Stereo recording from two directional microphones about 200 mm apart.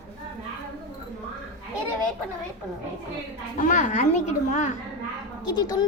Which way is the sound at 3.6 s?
40° left (ahead or behind).